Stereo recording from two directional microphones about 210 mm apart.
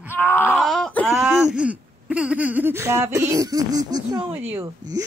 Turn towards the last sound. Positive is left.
turn(degrees=-15)  # may be behind; listen again after turning